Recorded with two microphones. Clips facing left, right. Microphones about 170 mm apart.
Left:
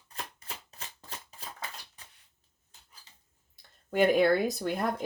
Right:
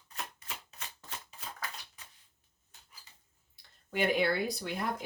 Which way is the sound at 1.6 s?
25° left (ahead or behind).